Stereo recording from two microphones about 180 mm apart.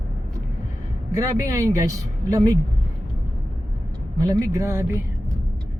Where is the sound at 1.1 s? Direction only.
20° right (ahead or behind).